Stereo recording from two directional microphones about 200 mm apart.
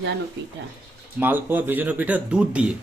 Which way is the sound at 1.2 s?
10° right (ahead or behind).